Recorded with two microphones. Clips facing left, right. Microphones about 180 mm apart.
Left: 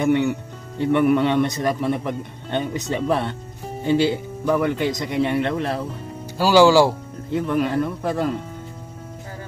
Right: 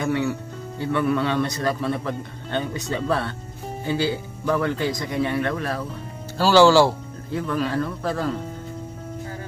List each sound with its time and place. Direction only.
0.0 s speech: 20° left (ahead or behind)
6.3 s speech: 10° left (ahead or behind)